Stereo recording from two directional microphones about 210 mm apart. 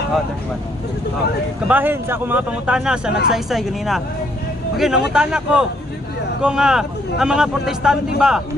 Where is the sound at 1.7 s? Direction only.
10° right (ahead or behind).